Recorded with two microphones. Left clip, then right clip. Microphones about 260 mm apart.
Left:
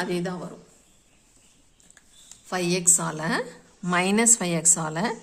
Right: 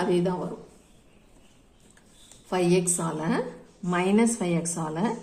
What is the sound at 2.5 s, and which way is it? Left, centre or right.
A woman's voice, left.